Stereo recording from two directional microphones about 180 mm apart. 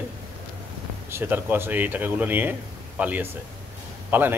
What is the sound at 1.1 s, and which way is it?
A man's voice, 10° right (ahead or behind).